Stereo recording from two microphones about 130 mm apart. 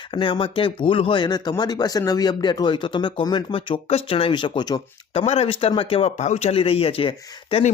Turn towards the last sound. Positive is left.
turn(degrees=45)  # may be behind; listen again after turning